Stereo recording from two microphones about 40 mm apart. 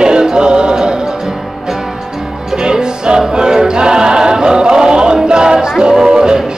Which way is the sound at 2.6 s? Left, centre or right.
Right.